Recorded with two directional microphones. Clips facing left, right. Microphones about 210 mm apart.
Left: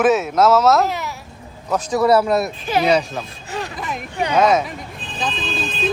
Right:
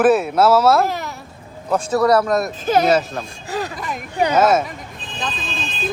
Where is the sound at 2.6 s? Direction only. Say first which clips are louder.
Right 3 dB; 45° right (ahead or behind).